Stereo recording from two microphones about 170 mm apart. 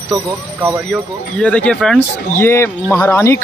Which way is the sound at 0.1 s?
10° right (ahead or behind).